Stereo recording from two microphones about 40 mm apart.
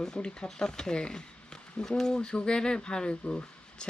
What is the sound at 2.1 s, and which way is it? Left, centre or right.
Speech, left.